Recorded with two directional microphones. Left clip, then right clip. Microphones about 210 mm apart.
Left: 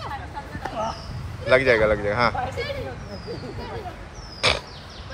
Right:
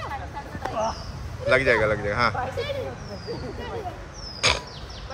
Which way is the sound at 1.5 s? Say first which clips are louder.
Left 2 dB; 5° right (ahead or behind).